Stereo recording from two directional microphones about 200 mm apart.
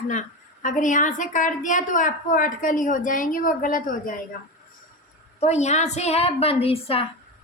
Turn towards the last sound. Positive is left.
turn(degrees=30)  # may be behind; listen again after turning